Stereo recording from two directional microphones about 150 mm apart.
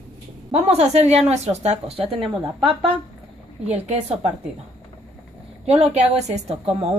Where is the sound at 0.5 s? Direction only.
45° right (ahead or behind).